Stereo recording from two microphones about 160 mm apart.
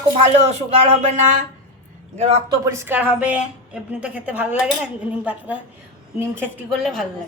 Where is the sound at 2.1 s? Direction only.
45° right (ahead or behind).